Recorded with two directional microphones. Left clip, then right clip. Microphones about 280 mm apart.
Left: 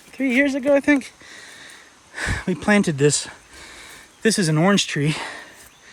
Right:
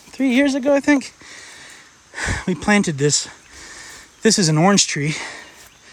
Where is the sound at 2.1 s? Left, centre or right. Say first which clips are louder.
Right 2 dB; centre.